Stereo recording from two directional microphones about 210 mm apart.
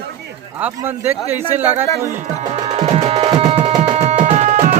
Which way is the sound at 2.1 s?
35° right (ahead or behind).